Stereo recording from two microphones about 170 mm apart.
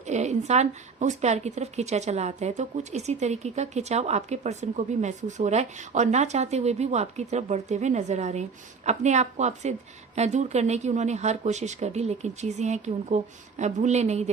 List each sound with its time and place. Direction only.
0.1 s a woman's voice: 40° right (ahead or behind)